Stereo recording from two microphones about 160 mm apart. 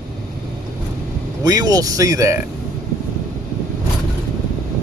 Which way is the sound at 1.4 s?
20° right (ahead or behind).